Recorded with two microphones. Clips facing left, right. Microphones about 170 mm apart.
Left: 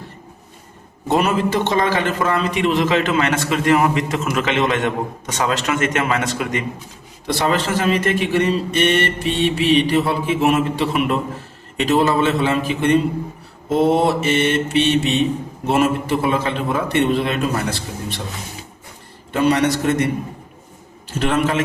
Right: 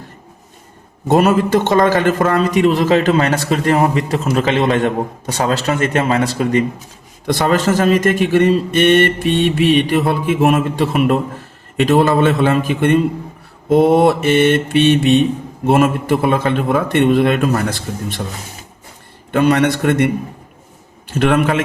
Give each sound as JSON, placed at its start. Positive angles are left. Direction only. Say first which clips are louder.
{"t": 1.0, "sound": "a man's voice", "louder": "right 5 dB", "side_deg": -45}
{"t": 7.3, "sound": "a man's voice", "louder": "right 4 dB", "side_deg": -45}
{"t": 19.3, "sound": "a man's voice", "louder": "right 3 dB", "side_deg": -55}
{"t": 21.2, "sound": "a man's voice", "louder": "right 4 dB", "side_deg": -60}